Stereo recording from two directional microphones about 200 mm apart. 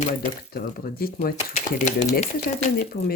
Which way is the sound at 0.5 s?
50° left (ahead or behind).